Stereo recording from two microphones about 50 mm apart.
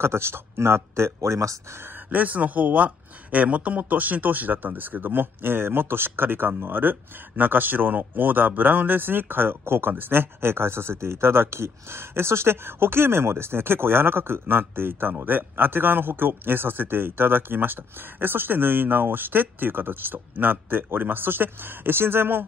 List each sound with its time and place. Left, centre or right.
0.0 s speech: right
1.8 s speech: right